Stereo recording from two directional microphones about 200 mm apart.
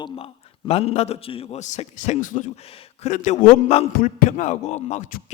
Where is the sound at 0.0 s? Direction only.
25° left (ahead or behind).